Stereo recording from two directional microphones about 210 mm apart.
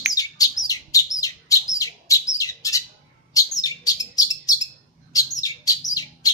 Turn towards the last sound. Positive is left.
turn(degrees=15)  # may be behind; listen again after turning